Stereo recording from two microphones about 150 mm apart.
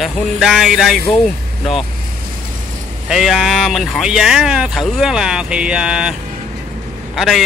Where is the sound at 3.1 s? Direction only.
Centre (ahead or behind).